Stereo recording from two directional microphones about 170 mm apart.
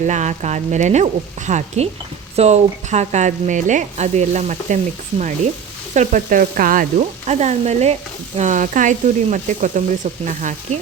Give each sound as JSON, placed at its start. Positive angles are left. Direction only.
{"t": 0.1, "sound": "speech", "side_deg": -45}
{"t": 7.3, "sound": "stir", "side_deg": -40}
{"t": 8.4, "sound": "speech", "side_deg": -45}